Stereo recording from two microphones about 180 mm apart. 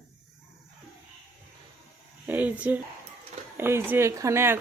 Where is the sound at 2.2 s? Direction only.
10° right (ahead or behind).